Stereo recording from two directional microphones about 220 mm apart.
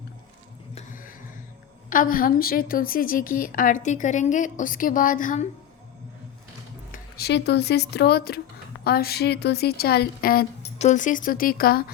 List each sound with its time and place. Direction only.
0.8 s music: 35° left (ahead or behind)
1.9 s a woman's voice: 40° left (ahead or behind)
6.9 s speech: 45° left (ahead or behind)